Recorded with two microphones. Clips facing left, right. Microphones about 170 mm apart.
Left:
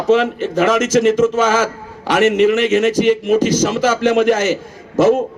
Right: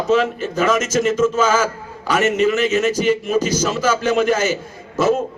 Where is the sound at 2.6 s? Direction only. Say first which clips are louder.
Left 4 dB; 70° left (ahead or behind).